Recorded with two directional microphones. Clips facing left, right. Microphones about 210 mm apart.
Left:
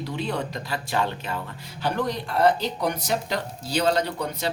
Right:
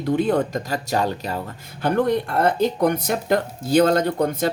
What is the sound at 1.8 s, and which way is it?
Speech, 55° right (ahead or behind).